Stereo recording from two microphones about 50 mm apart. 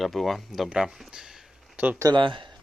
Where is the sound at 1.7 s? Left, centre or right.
Right.